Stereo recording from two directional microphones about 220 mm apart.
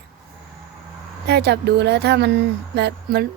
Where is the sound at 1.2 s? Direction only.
50° right (ahead or behind).